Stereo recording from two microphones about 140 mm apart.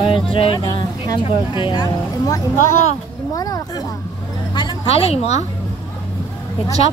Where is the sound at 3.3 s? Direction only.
25° left (ahead or behind).